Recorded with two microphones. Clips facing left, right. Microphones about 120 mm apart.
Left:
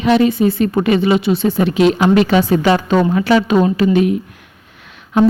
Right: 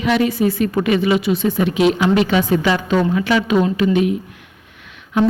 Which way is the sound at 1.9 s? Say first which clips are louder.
Left 3 dB; 45° left (ahead or behind).